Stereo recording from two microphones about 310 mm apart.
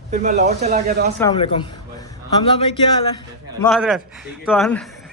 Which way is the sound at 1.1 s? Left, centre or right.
Centre.